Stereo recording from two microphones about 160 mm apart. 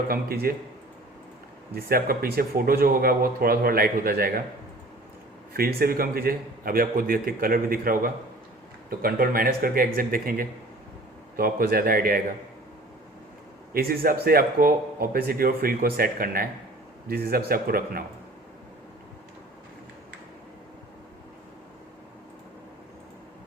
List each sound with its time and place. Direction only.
0.1 s speech: 70° right (ahead or behind)
1.7 s speech: 70° right (ahead or behind)
5.5 s a man's voice: 70° right (ahead or behind)
13.7 s speech: 70° right (ahead or behind)